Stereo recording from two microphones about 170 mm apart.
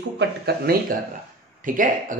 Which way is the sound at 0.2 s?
70° right (ahead or behind).